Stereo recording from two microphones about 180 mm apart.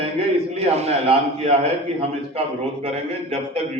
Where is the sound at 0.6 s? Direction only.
35° right (ahead or behind).